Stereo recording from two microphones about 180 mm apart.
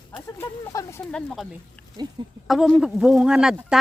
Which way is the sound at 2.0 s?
25° right (ahead or behind).